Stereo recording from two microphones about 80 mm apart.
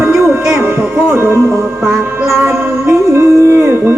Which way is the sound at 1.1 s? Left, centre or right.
Right.